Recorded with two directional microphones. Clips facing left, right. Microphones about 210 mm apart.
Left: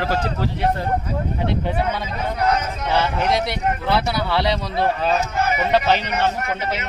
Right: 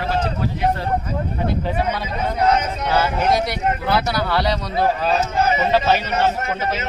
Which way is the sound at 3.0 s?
Centre (ahead or behind).